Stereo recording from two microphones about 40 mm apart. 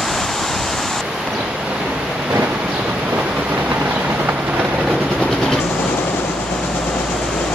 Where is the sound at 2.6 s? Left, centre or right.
Right.